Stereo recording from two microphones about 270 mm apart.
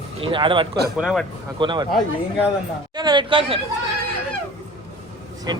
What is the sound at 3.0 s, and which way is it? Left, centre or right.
Speech, centre.